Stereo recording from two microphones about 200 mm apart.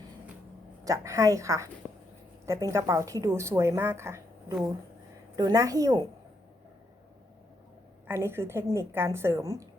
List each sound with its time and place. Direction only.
0.9 s a woman's voice: 15° right (ahead or behind)
8.0 s a woman's voice: 10° right (ahead or behind)